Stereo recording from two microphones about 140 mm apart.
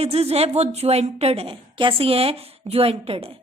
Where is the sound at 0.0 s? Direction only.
45° right (ahead or behind).